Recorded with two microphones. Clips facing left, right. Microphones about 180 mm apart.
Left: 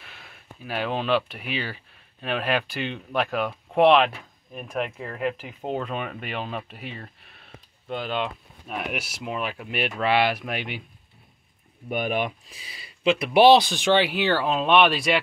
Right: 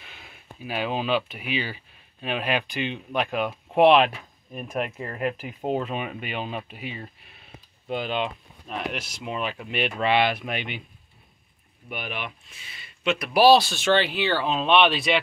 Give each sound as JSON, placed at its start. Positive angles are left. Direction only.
{"t": 0.0, "sound": "speech", "side_deg": 0}
{"t": 11.9, "sound": "speech", "side_deg": 45}